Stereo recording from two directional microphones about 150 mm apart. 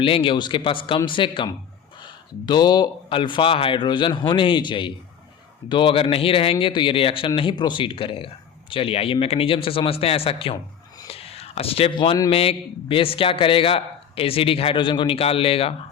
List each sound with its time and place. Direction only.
0.0 s a man's voice: 35° left (ahead or behind)